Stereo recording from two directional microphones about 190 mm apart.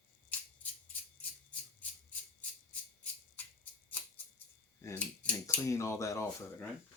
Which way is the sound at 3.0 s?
10° left (ahead or behind).